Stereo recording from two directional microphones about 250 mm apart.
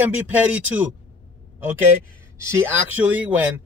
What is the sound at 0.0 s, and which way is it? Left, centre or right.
Speech, centre.